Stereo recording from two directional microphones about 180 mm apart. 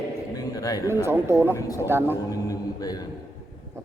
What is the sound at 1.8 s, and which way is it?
Speech, 15° right (ahead or behind).